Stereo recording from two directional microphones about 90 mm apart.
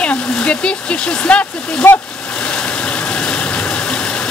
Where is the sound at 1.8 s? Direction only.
25° left (ahead or behind).